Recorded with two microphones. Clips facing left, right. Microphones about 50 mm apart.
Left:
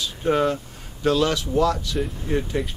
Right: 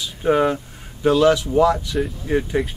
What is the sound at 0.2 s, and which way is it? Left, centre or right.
Speech, centre.